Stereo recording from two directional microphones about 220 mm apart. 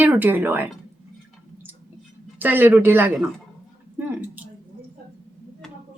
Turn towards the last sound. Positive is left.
turn(degrees=-10)  # may be behind; listen again after turning